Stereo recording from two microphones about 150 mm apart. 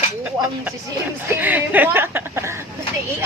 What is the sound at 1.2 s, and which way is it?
Speech, 10° right (ahead or behind).